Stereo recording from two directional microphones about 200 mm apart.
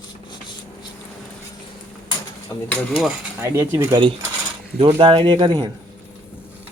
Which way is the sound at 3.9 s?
25° right (ahead or behind).